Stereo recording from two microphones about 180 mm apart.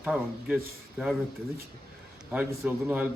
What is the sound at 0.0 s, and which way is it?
Speech, 5° right (ahead or behind).